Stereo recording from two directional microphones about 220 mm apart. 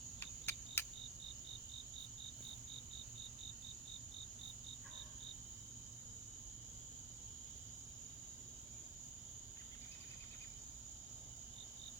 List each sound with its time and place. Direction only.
0.2 s cricket: 10° left (ahead or behind)